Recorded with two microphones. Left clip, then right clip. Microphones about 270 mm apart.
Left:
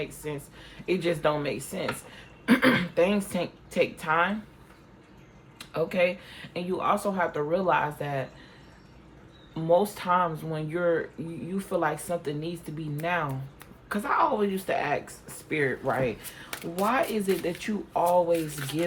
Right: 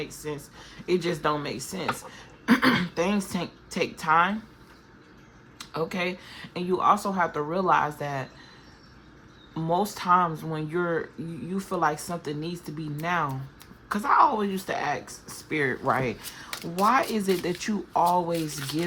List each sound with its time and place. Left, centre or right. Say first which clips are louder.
0.2 s speech: right 1 dB; centre
5.5 s speech: left 4 dB; centre
9.6 s speech: left 3 dB; centre